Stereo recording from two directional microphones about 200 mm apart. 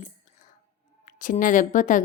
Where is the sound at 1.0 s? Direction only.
40° left (ahead or behind).